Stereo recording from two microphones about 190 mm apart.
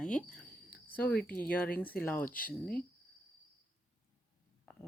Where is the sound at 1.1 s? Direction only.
55° left (ahead or behind).